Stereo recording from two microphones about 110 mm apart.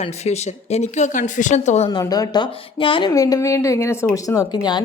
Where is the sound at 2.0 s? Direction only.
35° left (ahead or behind).